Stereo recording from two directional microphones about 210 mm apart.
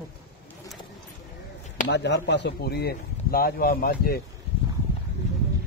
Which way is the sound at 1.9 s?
55° left (ahead or behind).